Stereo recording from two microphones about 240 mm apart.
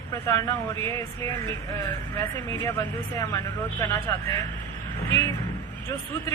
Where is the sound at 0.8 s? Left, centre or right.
Right.